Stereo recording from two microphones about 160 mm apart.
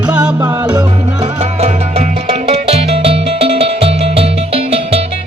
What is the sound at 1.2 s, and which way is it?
Music, 40° right (ahead or behind).